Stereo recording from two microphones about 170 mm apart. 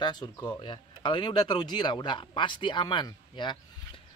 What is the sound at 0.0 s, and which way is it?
Speech, 25° left (ahead or behind).